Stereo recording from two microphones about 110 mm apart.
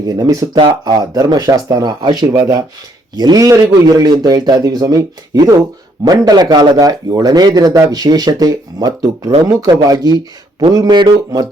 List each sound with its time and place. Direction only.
0.1 s speech: 30° right (ahead or behind)